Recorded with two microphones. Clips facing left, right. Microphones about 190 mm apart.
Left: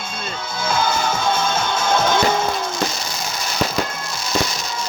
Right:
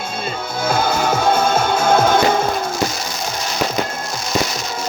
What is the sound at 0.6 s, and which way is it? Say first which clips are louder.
Music: right 3 dB; 55° right (ahead or behind).